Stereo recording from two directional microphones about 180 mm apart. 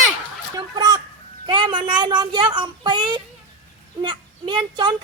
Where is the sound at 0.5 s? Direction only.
20° right (ahead or behind).